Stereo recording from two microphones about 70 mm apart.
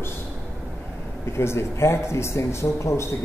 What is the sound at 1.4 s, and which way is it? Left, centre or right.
A man's voice, left.